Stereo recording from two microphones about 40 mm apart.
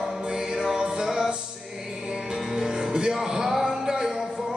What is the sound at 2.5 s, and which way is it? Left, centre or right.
Music, centre.